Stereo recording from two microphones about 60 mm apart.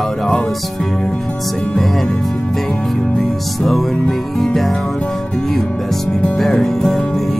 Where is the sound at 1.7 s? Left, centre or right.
Centre.